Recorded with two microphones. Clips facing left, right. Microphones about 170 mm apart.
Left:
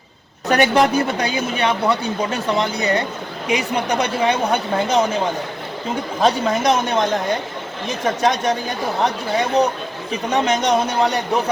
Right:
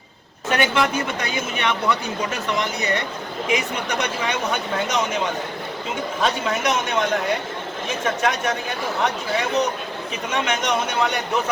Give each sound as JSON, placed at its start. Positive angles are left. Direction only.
{"t": 0.4, "sound": "speech", "side_deg": 40}